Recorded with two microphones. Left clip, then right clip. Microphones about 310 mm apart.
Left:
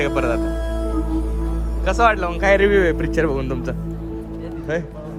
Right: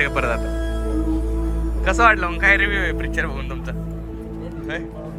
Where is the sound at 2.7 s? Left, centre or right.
Left.